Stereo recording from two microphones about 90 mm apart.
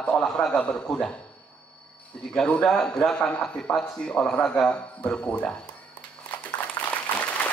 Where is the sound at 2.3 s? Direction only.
10° left (ahead or behind).